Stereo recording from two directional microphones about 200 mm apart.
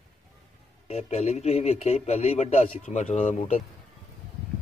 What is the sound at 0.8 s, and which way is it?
A man's voice, 30° left (ahead or behind).